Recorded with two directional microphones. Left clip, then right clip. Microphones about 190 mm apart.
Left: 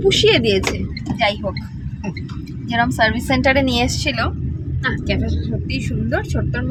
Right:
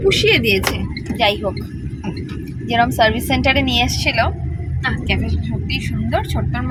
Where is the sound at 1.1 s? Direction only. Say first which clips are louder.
Right 2 dB; centre (ahead or behind).